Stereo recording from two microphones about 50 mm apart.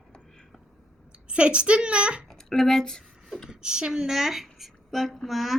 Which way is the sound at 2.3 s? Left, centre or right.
Centre.